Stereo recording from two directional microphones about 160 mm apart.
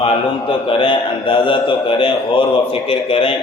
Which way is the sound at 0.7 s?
35° left (ahead or behind).